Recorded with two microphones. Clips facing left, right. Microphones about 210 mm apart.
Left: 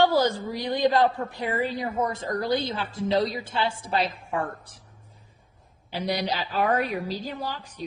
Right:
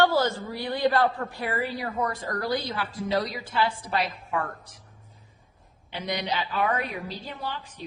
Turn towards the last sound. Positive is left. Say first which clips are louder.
# left 2 dB
turn(degrees=40)  # may be behind; listen again after turning